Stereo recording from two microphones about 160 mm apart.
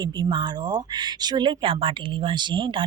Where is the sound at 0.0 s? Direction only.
25° right (ahead or behind).